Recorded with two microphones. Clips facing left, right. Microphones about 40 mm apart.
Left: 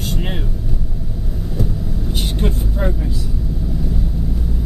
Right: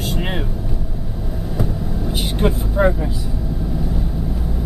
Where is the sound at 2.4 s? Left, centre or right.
Centre.